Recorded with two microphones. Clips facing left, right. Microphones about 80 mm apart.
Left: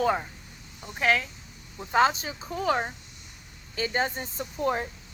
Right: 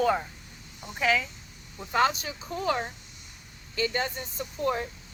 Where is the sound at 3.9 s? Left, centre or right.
Left.